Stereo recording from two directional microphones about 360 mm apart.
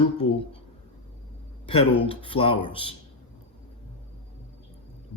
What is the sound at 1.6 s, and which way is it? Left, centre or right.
Speech, centre.